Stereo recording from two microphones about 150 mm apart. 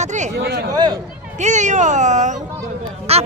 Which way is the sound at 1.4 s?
55° right (ahead or behind).